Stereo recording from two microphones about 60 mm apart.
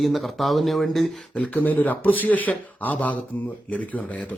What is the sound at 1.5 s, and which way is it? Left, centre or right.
Speech, left.